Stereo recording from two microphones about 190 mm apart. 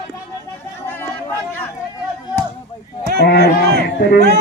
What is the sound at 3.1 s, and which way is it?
A man's voice, 60° left (ahead or behind).